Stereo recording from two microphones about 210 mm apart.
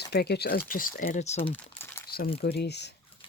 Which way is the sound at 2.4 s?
50° left (ahead or behind).